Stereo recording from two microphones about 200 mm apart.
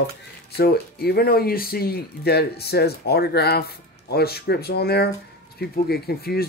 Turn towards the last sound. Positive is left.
turn(degrees=50)  # may be behind; listen again after turning